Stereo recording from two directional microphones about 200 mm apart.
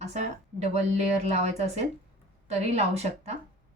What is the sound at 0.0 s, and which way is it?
A woman's voice, 35° right (ahead or behind).